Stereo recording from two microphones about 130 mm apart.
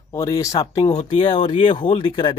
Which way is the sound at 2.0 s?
40° left (ahead or behind).